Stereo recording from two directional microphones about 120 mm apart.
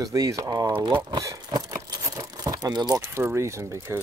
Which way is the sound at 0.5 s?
40° right (ahead or behind).